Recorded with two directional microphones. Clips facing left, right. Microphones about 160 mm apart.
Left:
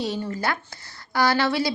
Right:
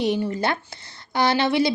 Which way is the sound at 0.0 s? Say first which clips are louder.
Right 4 dB; 20° right (ahead or behind).